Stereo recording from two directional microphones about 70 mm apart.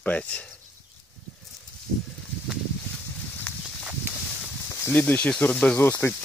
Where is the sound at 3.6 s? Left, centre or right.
Right.